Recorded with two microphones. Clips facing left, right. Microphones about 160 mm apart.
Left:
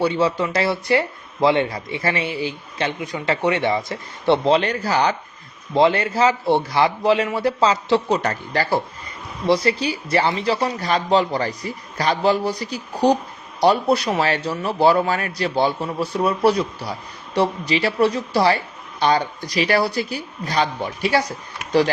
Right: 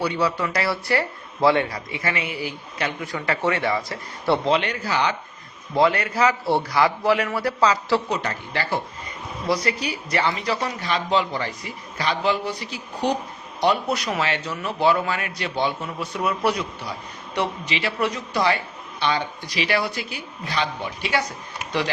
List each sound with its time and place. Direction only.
0.0 s speech: 25° left (ahead or behind)
5.7 s speech: 25° left (ahead or behind)
8.2 s a woman's voice: 40° left (ahead or behind)
9.5 s a woman's voice: 30° left (ahead or behind)